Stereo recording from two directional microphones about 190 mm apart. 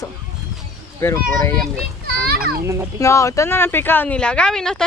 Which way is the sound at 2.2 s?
55° right (ahead or behind).